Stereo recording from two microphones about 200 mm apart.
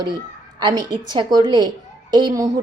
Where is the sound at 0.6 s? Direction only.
20° right (ahead or behind).